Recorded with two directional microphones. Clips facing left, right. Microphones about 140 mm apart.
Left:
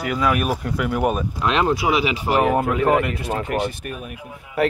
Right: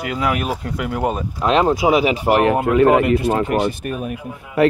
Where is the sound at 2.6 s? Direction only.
75° right (ahead or behind); by 3.7 s 90° right.